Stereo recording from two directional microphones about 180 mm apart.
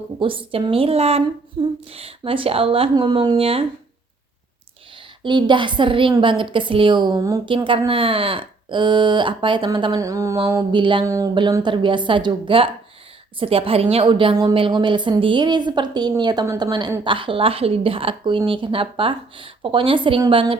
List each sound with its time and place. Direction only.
0.2 s a woman's voice: 30° right (ahead or behind)
5.2 s a woman's voice: 25° right (ahead or behind)